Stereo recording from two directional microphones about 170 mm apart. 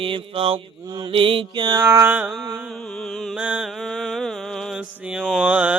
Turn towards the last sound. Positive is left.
turn(degrees=-5)  # may be behind; listen again after turning